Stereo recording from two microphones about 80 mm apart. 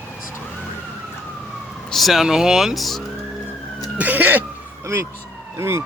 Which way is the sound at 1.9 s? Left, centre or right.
Centre.